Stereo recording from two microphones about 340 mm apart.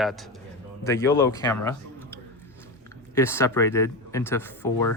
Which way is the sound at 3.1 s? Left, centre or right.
Centre.